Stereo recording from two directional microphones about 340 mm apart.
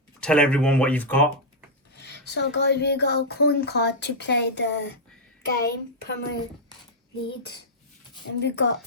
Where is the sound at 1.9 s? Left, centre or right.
Left.